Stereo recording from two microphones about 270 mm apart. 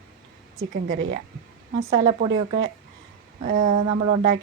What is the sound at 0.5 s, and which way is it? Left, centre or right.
A woman's voice, right.